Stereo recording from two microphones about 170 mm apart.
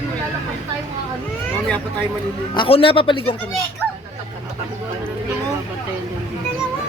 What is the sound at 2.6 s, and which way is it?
Speech, 30° left (ahead or behind).